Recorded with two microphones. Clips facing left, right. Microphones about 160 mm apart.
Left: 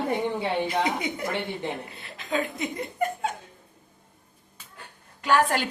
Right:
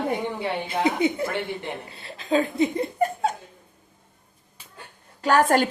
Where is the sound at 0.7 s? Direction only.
25° right (ahead or behind).